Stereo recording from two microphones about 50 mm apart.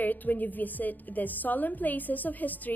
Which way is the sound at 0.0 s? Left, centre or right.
Left.